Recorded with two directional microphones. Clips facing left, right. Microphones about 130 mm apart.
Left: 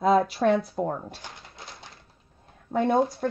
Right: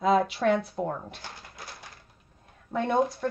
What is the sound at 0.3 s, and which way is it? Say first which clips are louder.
Speech: left 2 dB; 40° left (ahead or behind).